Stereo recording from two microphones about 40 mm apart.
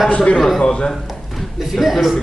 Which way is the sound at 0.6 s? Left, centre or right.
Centre.